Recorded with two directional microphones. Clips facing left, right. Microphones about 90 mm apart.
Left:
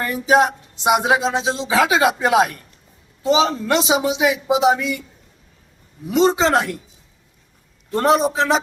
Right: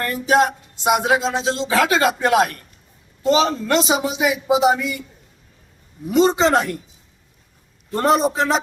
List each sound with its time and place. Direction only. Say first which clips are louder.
0.0 s a man's voice: left 1 dB; 15° left (ahead or behind); by 5.0 s centre (ahead or behind)
6.1 s a man's voice: even; centre (ahead or behind)
7.9 s a man's voice: left 1 dB; centre (ahead or behind)